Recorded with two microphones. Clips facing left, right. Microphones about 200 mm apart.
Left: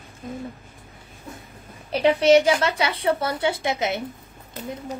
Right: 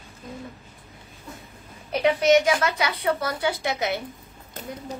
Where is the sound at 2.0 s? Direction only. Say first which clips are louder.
Left 3 dB; 30° left (ahead or behind).